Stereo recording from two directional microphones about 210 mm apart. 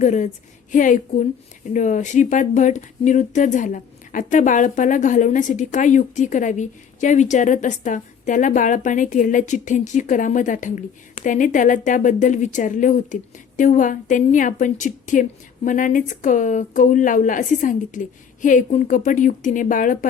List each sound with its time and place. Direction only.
0.0 s speech: 35° left (ahead or behind)